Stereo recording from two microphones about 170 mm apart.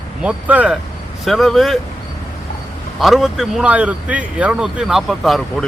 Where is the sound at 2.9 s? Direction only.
Centre (ahead or behind).